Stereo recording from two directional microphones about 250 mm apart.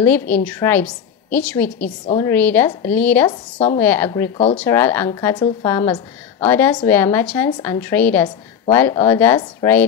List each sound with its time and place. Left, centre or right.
0.0 s a woman's voice: centre
3.3 s speech: left
3.8 s a woman's voice: centre